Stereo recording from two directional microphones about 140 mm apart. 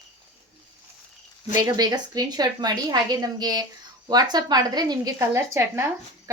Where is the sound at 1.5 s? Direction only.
30° right (ahead or behind).